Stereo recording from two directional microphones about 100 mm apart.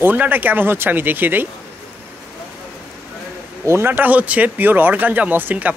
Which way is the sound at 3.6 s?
25° right (ahead or behind).